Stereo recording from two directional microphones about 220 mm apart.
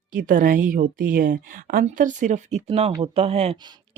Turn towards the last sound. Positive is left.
turn(degrees=-25)  # may be behind; listen again after turning